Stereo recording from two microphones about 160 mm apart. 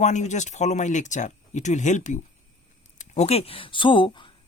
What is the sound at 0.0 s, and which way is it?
Speech, 50° left (ahead or behind).